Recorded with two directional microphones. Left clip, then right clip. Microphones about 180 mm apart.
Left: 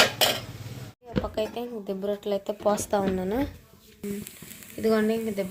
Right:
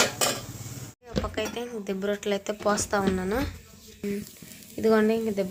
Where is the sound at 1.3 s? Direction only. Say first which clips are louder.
Left 2 dB; 25° left (ahead or behind).